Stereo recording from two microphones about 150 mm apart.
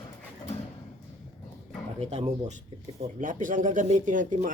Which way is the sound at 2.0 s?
45° right (ahead or behind).